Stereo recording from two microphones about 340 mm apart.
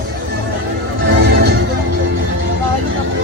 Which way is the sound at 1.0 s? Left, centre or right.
Right.